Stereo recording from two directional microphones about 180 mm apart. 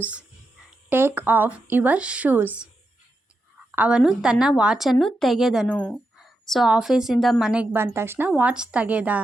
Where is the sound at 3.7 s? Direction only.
5° right (ahead or behind).